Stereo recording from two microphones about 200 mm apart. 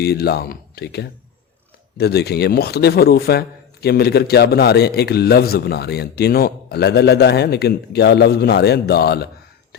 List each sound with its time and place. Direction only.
0.0 s a man's voice: 55° left (ahead or behind)